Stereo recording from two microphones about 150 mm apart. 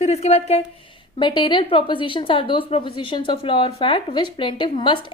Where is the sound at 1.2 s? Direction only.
30° left (ahead or behind).